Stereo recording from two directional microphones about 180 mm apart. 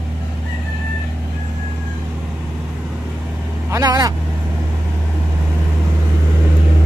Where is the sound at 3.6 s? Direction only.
20° right (ahead or behind).